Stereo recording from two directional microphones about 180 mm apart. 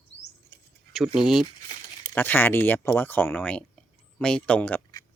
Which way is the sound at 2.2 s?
10° left (ahead or behind).